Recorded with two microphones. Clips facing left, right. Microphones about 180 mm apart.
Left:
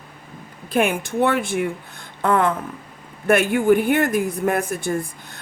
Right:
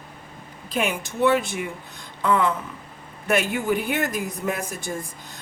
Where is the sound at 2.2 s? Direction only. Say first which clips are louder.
Left 3 dB; 55° left (ahead or behind).